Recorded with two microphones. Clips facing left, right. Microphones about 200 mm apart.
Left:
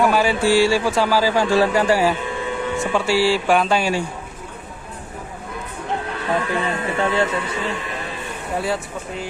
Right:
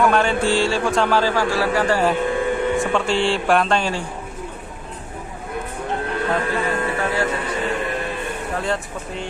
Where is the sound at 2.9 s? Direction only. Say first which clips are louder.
Left 2 dB; 5° left (ahead or behind).